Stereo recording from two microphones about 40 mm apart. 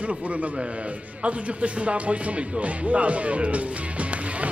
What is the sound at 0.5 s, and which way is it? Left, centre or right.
Music, right.